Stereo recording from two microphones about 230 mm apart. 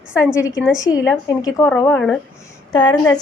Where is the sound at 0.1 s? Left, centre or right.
Centre.